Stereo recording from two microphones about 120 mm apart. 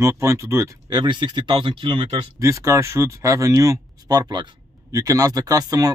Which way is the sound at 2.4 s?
25° right (ahead or behind).